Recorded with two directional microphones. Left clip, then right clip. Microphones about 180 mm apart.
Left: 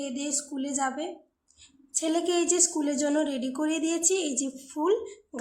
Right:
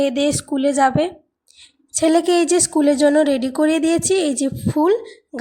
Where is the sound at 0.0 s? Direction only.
40° right (ahead or behind).